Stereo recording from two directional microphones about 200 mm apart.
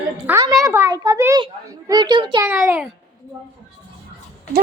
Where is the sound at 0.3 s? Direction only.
15° right (ahead or behind).